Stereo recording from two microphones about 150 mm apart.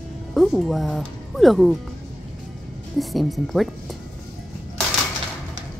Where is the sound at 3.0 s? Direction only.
Centre (ahead or behind).